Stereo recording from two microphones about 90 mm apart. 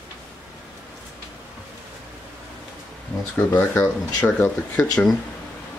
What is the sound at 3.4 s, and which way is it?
Speech, 25° left (ahead or behind).